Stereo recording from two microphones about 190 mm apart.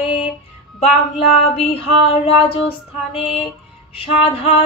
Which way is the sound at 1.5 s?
30° left (ahead or behind).